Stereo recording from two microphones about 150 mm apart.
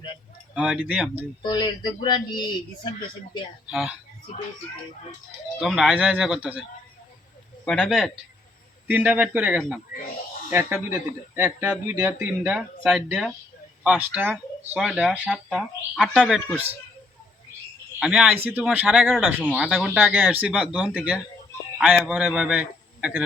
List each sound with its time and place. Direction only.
0.5 s speech: 5° right (ahead or behind)
1.4 s speech: 30° left (ahead or behind)
3.7 s speech: 5° right (ahead or behind)
5.5 s speech: 5° right (ahead or behind)
7.6 s speech: 5° left (ahead or behind)
8.9 s speech: 10° right (ahead or behind)
18.0 s a man's voice: 5° right (ahead or behind)